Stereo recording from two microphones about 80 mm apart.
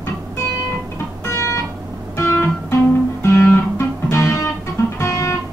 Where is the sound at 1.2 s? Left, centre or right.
Left.